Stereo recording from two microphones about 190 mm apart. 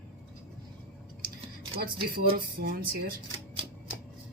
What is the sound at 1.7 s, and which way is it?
Speech, 55° right (ahead or behind).